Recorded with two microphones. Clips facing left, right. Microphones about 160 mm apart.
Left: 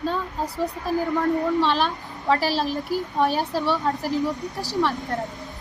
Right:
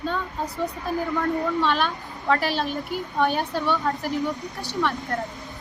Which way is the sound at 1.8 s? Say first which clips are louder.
Left 1 dB; 30° left (ahead or behind).